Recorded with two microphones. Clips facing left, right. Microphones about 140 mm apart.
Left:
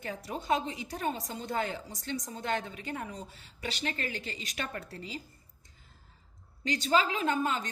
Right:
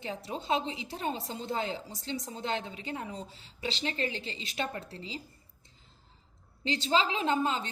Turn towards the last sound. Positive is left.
turn(degrees=-25)  # may be behind; listen again after turning